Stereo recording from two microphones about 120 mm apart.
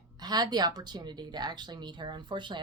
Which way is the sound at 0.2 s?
35° right (ahead or behind).